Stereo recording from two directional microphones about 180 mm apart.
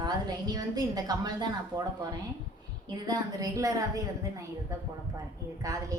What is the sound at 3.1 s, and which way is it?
A woman's voice, 20° right (ahead or behind).